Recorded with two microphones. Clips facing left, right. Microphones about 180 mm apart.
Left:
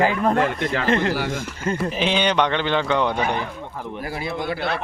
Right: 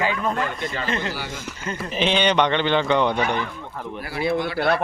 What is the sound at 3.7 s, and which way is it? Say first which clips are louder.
Speech: right 1 dB; 15° left (ahead or behind).